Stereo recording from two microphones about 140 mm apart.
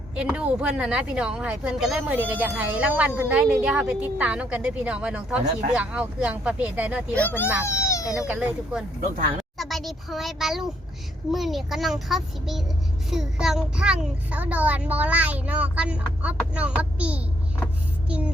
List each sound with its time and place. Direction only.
0.2 s a woman's voice: 10° right (ahead or behind)
7.1 s speech: 15° left (ahead or behind)
7.6 s baby cry: 20° left (ahead or behind)
8.3 s a woman's voice: 10° right (ahead or behind)
9.6 s a child's voice: centre (ahead or behind)